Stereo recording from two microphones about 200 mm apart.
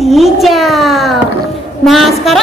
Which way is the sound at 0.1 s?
Centre (ahead or behind).